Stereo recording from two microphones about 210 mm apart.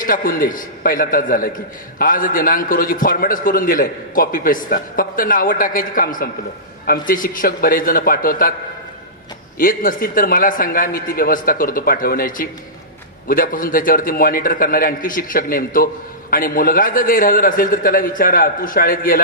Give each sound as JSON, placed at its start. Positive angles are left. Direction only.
{"t": 0.0, "sound": "a man's voice", "side_deg": 40}
{"t": 9.6, "sound": "a man's voice", "side_deg": 40}